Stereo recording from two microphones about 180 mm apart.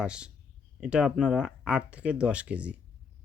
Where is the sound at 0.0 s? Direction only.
5° right (ahead or behind).